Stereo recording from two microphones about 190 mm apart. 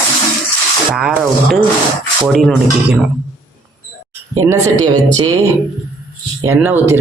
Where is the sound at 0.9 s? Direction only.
Centre (ahead or behind).